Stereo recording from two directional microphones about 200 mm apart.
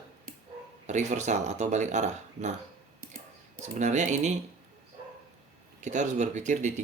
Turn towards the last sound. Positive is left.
turn(degrees=-35)  # may be behind; listen again after turning